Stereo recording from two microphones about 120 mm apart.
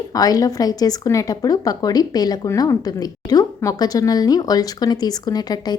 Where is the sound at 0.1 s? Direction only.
30° left (ahead or behind).